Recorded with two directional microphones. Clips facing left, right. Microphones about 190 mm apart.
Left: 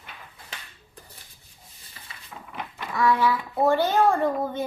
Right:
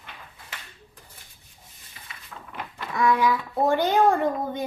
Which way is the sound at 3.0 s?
15° right (ahead or behind).